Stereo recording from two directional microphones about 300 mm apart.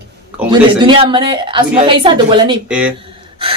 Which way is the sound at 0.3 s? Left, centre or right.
Centre.